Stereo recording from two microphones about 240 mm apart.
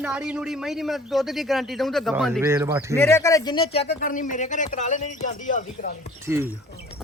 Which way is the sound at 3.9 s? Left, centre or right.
Left.